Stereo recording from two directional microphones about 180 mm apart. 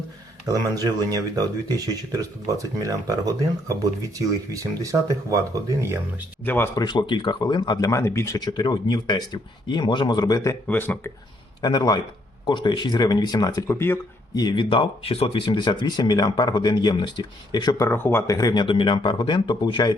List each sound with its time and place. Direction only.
0.4 s speech: 20° right (ahead or behind)
6.4 s speech: 10° left (ahead or behind)
6.8 s speech: 25° left (ahead or behind)
11.6 s speech: 25° left (ahead or behind)